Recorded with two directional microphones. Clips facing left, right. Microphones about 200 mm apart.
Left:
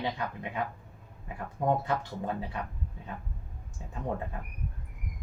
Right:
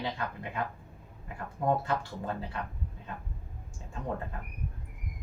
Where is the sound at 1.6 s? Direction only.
20° left (ahead or behind).